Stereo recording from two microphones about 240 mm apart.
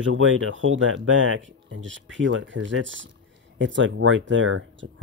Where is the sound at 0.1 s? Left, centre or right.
Right.